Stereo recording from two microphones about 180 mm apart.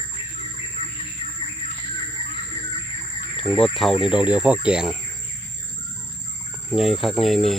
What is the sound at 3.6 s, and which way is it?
Speech, centre (ahead or behind).